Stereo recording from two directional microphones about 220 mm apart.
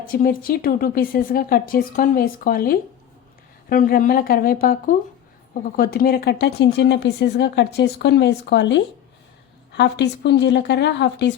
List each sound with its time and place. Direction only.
0.1 s speech: 40° left (ahead or behind)